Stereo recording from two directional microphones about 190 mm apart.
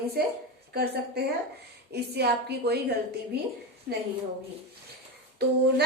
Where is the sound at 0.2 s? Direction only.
55° right (ahead or behind).